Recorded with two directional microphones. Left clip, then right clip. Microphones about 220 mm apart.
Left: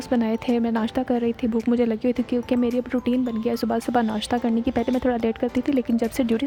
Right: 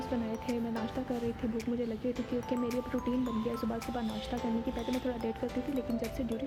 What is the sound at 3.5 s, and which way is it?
Speech, 50° left (ahead or behind).